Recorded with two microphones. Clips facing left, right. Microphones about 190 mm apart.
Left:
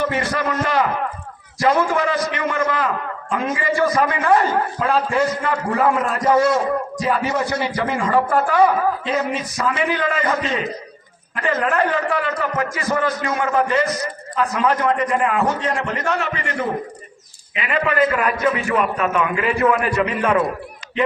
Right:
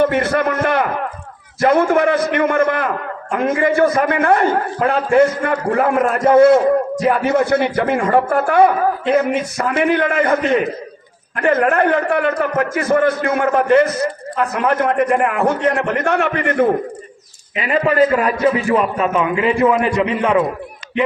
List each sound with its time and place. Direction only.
0.0 s a man's voice: 55° right (ahead or behind)
17.5 s a man's voice: 35° right (ahead or behind); by 20.4 s 20° right (ahead or behind)